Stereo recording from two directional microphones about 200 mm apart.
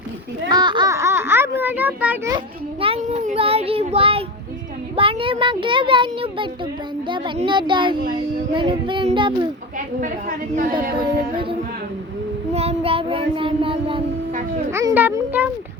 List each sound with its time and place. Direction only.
0.4 s a sound: 20° right (ahead or behind)
2.8 s a child's voice: 30° right (ahead or behind)
9.7 s a woman's voice: 45° right (ahead or behind)
10.9 s speech: 25° right (ahead or behind)
12.5 s speech: 30° right (ahead or behind)
14.7 s a child's voice: 15° right (ahead or behind)